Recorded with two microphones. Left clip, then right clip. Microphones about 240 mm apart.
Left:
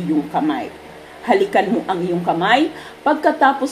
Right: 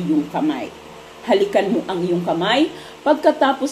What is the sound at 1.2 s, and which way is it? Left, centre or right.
A woman's voice, left.